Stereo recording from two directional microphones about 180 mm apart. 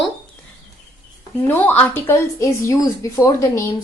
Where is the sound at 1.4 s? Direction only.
10° left (ahead or behind).